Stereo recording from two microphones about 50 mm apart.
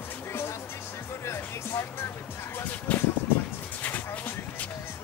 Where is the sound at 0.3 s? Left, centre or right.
Left.